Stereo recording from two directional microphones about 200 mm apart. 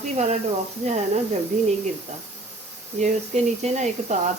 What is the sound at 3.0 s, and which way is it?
Speech, 35° right (ahead or behind).